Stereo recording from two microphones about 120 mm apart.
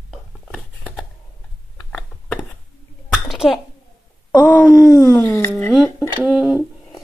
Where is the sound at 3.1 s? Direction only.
Centre (ahead or behind).